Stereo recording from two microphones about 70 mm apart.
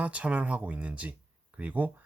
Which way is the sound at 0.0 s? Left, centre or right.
Centre.